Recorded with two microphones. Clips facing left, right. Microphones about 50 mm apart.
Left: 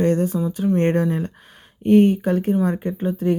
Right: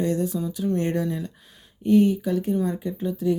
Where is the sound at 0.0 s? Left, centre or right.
Left.